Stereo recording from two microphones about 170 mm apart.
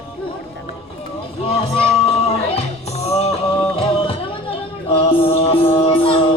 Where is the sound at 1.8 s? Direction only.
35° left (ahead or behind).